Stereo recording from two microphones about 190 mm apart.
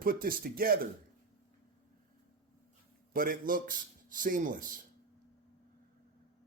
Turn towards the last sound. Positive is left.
turn(degrees=-45)  # may be behind; listen again after turning